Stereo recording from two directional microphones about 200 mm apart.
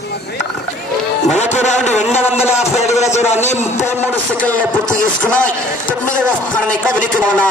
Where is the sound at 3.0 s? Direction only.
35° left (ahead or behind).